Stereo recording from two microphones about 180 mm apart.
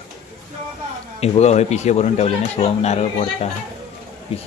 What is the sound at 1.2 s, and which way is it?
Speech, 40° left (ahead or behind).